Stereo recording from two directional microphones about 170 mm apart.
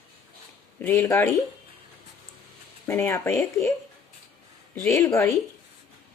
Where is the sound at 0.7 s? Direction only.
10° left (ahead or behind).